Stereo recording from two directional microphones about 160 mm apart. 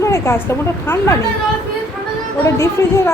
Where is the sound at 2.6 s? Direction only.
15° left (ahead or behind).